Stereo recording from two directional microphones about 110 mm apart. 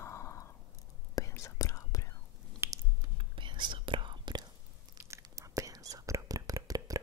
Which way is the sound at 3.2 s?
45° right (ahead or behind).